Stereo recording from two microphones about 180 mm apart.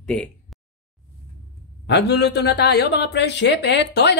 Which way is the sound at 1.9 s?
70° left (ahead or behind).